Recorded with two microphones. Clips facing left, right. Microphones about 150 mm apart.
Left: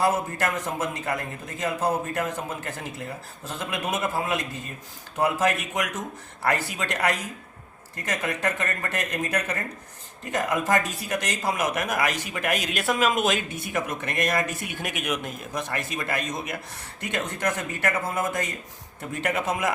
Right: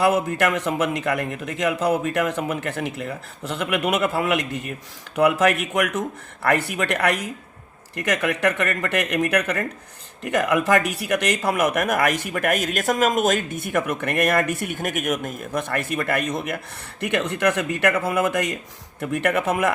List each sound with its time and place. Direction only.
0.0 s a man's voice: 70° right (ahead or behind)
7.9 s a man's voice: 75° right (ahead or behind)